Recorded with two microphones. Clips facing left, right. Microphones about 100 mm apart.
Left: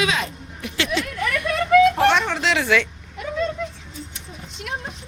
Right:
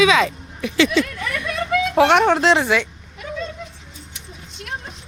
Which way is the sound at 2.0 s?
65° right (ahead or behind).